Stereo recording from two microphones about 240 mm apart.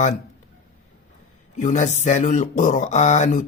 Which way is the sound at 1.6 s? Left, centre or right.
Left.